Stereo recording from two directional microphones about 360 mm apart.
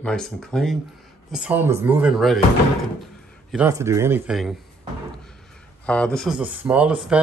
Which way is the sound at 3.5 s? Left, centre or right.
Centre.